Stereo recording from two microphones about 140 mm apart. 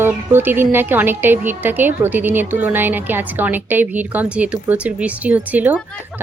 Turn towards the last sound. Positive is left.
turn(degrees=-10)  # may be behind; listen again after turning